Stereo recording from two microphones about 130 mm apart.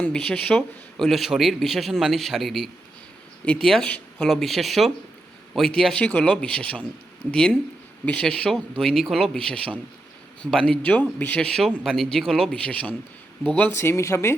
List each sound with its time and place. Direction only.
0.0 s a man's voice: 5° left (ahead or behind)